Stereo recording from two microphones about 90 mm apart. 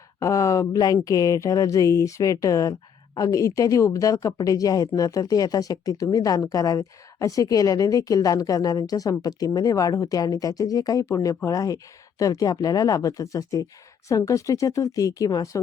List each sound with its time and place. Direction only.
0.2 s speech: 35° left (ahead or behind)